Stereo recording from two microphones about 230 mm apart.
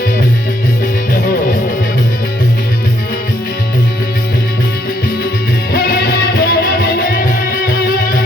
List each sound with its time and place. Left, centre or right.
5.7 s music: left